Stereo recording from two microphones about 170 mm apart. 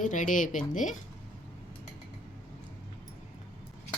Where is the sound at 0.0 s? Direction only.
50° left (ahead or behind).